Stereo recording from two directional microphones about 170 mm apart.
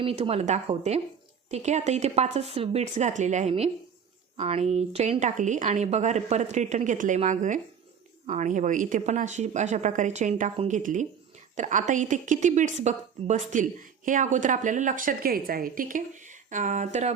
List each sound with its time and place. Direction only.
0.0 s a woman's voice: 35° right (ahead or behind)